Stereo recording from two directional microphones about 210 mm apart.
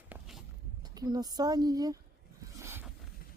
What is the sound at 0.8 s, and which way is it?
Speech, 20° right (ahead or behind).